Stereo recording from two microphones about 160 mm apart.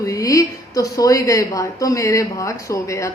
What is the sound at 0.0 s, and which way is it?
Speech, 20° left (ahead or behind).